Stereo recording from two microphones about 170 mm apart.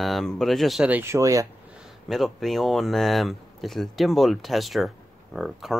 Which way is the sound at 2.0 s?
Centre (ahead or behind).